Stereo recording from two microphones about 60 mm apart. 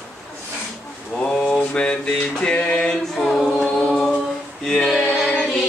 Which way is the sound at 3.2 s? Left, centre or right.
Centre.